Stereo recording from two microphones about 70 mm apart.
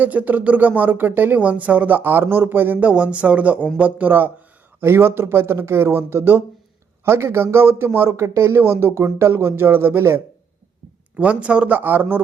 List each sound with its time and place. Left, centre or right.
0.0 s speech: right
2.9 s speech: centre
4.8 s speech: right
8.1 s speech: right
11.2 s speech: centre